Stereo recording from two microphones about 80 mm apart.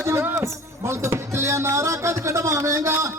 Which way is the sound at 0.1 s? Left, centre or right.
Right.